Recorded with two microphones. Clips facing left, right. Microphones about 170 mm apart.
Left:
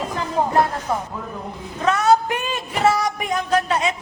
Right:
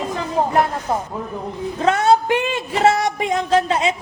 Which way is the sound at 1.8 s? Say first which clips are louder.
Right 1 dB; 25° right (ahead or behind).